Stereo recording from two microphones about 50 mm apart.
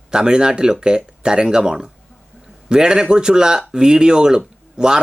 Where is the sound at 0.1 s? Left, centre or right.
Centre.